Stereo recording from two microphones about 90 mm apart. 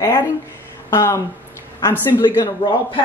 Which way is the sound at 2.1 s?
55° left (ahead or behind).